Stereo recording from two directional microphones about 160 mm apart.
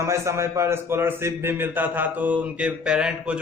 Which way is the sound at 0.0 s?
15° right (ahead or behind).